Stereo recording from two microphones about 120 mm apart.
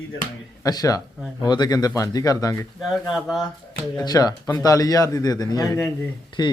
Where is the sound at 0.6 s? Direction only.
30° left (ahead or behind).